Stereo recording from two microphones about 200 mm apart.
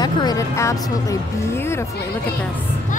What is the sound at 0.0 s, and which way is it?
Speech, 20° left (ahead or behind).